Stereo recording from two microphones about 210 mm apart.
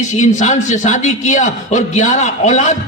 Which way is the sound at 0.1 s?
35° left (ahead or behind).